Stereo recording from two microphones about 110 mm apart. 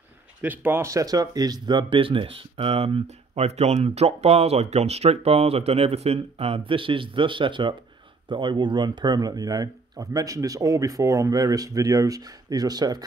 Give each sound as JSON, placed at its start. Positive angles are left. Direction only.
{"t": 0.4, "sound": "speech", "side_deg": -20}